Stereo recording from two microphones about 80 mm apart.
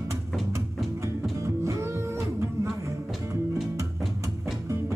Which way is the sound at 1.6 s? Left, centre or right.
Right.